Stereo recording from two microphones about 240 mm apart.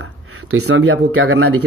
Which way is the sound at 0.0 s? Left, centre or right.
Right.